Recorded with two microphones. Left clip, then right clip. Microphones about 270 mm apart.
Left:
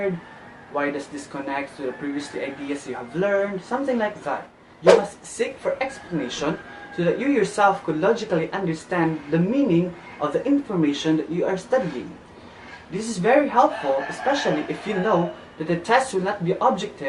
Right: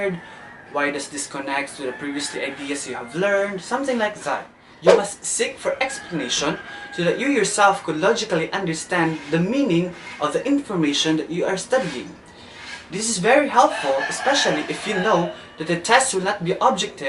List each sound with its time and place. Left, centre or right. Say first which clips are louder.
0.8 s a woman's voice: right 2 dB; centre